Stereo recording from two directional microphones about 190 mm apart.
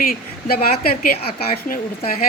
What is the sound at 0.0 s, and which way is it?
Speech, 50° left (ahead or behind).